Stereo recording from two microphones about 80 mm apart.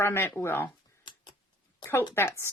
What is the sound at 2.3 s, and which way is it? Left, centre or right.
Speech, left.